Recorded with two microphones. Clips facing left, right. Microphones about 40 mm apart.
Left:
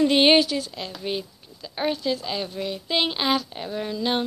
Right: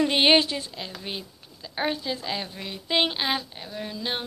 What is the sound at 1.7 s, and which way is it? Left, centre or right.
Speech, right.